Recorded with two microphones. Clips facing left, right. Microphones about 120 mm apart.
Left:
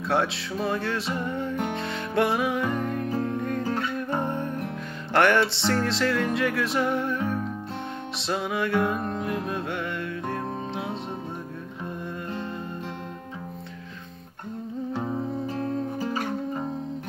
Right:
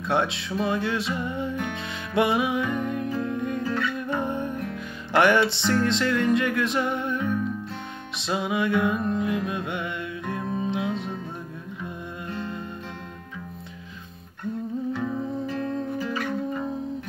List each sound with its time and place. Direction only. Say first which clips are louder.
0.0 s music: even; centre (ahead or behind)
3.6 s music: right 1 dB; 35° left (ahead or behind)
4.2 s music: even; 5° right (ahead or behind)
10.8 s music: right 3 dB; 30° left (ahead or behind)
14.9 s music: left 2 dB; 30° left (ahead or behind)